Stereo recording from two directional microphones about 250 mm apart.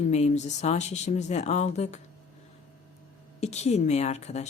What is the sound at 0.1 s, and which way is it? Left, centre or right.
A woman's voice, left.